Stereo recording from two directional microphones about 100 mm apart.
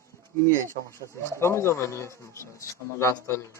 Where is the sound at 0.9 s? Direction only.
25° left (ahead or behind).